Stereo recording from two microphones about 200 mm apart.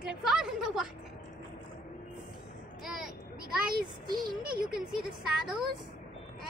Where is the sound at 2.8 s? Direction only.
Centre (ahead or behind).